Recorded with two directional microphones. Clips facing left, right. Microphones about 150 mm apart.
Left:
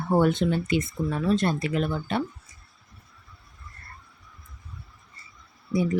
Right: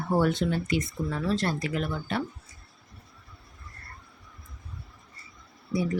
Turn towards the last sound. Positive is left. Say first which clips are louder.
# left 3 dB
turn(degrees=20)  # may be behind; listen again after turning